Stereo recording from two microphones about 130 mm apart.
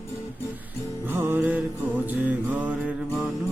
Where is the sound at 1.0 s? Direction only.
15° right (ahead or behind).